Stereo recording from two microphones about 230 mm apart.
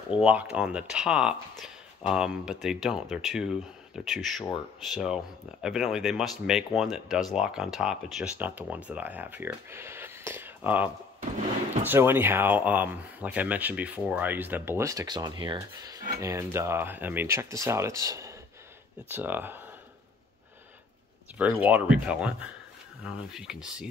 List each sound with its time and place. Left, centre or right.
0.1 s speech: centre
21.4 s speech: centre